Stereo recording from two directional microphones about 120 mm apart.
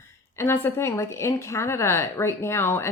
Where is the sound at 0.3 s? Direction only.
20° left (ahead or behind).